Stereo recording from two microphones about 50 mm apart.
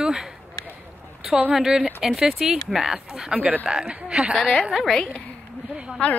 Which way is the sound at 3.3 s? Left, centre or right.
Right.